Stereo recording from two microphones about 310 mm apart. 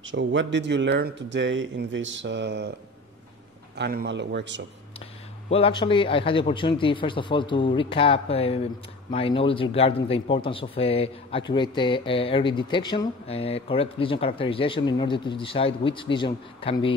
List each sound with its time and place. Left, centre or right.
0.1 s speech: right
3.7 s speech: right
5.5 s speech: centre